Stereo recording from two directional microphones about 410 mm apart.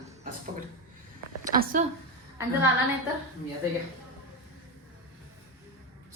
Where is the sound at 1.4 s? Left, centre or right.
Centre.